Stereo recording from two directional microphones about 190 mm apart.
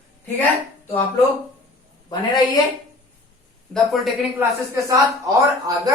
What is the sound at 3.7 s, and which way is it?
Speech, centre (ahead or behind).